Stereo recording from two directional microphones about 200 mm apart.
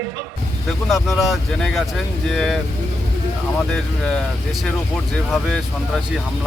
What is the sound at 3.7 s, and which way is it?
Speech, 5° left (ahead or behind).